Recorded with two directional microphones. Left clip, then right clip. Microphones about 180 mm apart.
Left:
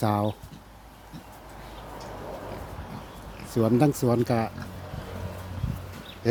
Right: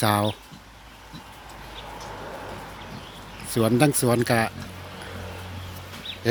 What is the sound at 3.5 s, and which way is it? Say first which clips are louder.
Speech: right 2 dB; 5° left (ahead or behind).